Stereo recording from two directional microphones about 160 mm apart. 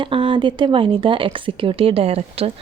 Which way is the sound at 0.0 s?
30° right (ahead or behind).